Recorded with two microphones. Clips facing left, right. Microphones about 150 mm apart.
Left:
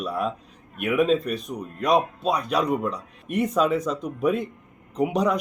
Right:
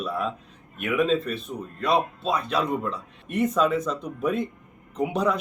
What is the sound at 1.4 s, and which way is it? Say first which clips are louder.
Speech: left 2 dB; 15° left (ahead or behind).